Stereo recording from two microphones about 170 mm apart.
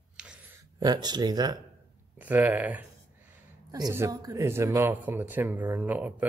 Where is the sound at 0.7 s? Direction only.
25° right (ahead or behind).